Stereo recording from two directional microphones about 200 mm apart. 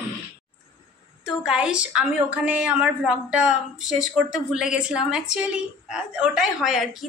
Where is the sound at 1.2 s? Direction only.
5° right (ahead or behind).